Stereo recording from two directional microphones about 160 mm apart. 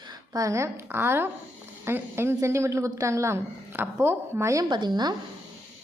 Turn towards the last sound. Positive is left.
turn(degrees=-25)  # may be behind; listen again after turning